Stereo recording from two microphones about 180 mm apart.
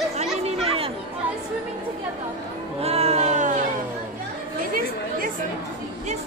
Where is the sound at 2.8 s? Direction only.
35° right (ahead or behind).